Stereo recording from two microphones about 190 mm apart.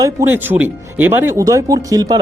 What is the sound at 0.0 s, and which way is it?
Speech, 15° right (ahead or behind).